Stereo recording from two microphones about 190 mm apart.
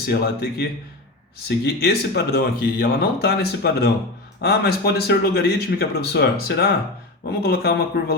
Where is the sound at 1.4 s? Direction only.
55° left (ahead or behind).